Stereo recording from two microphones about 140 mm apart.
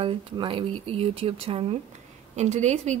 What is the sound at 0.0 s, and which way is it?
Speech, 40° right (ahead or behind).